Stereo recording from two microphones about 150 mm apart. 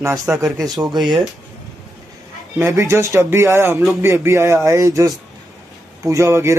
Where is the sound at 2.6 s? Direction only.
20° right (ahead or behind).